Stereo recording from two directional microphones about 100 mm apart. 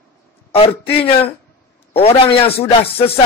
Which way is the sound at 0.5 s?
70° left (ahead or behind).